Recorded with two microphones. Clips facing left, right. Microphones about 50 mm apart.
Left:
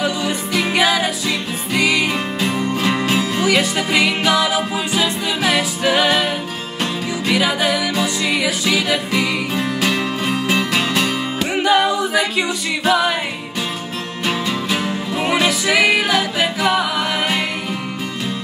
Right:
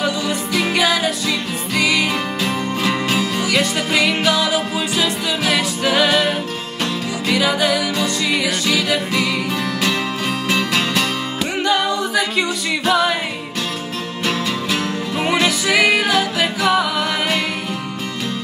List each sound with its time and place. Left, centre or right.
0.0 s music: centre
14.2 s music: centre